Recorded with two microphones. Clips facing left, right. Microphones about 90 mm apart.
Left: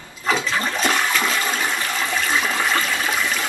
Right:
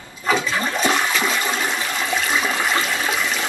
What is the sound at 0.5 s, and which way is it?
Toilet flush, 10° right (ahead or behind).